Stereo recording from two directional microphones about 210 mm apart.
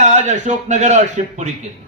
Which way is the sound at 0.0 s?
35° right (ahead or behind).